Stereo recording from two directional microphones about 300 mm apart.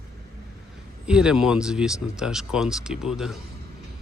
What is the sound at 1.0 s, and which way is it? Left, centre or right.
Speech, centre.